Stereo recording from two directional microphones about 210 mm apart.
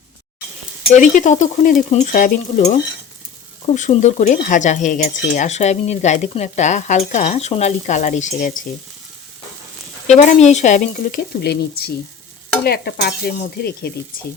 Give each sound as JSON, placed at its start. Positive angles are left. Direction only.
{"t": 0.9, "sound": "speech", "side_deg": 35}
{"t": 3.8, "sound": "speech", "side_deg": 35}
{"t": 10.1, "sound": "speech", "side_deg": 35}
{"t": 12.6, "sound": "stir", "side_deg": 50}